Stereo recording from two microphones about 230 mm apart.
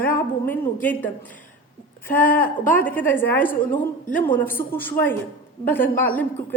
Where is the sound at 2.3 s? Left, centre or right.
Left.